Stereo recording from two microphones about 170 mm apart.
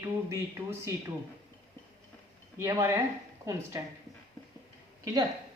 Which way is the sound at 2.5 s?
15° right (ahead or behind).